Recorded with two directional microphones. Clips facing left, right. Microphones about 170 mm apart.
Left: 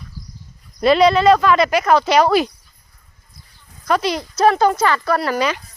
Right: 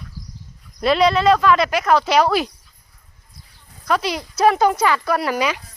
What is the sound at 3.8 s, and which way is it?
Speech, 5° right (ahead or behind).